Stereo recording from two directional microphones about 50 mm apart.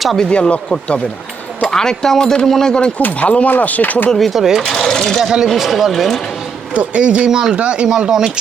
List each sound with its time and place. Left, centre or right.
0.3 s speech: left
3.0 s speech: left
4.2 s speech: centre
4.6 s speech: centre
5.5 s speech: centre
6.7 s speech: right
7.3 s speech: centre